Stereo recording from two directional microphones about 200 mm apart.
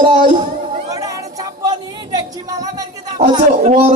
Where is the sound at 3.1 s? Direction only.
30° right (ahead or behind).